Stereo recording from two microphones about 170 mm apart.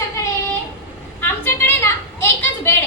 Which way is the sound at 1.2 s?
15° left (ahead or behind).